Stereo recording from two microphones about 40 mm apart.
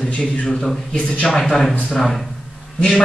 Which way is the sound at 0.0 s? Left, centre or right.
Left.